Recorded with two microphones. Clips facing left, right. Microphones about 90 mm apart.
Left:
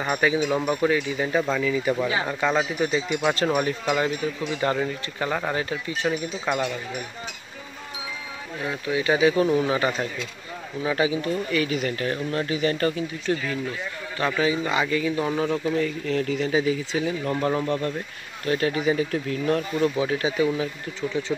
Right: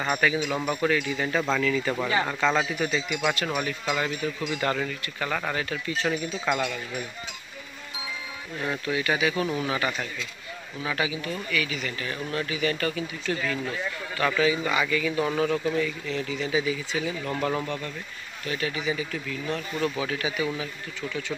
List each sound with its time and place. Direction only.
0.2 s speech: 25° left (ahead or behind)
0.6 s speech: 10° left (ahead or behind)
8.6 s speech: 20° left (ahead or behind); by 13.0 s 35° left (ahead or behind)
13.2 s speech: 20° left (ahead or behind)
15.8 s speech: 45° left (ahead or behind)
17.3 s speech: 20° left (ahead or behind)
17.6 s speech: 40° left (ahead or behind)
19.8 s speech: 30° left (ahead or behind)